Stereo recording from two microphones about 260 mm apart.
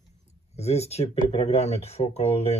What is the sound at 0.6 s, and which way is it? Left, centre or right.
Speech, left.